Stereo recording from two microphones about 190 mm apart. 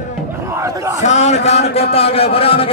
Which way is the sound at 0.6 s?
15° right (ahead or behind).